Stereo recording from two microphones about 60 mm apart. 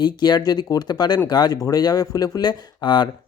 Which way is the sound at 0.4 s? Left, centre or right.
Left.